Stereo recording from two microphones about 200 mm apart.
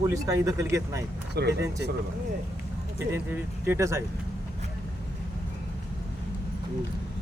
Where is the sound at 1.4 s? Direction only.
55° right (ahead or behind).